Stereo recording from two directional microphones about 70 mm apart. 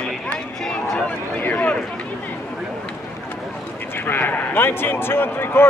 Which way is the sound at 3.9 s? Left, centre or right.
Left.